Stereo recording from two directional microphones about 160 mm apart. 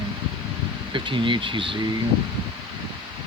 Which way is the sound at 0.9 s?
30° right (ahead or behind).